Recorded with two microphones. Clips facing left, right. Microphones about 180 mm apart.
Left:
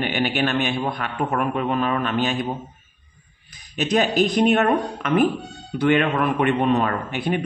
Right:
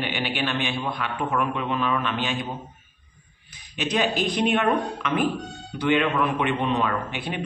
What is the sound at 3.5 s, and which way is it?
A man's voice, 40° left (ahead or behind).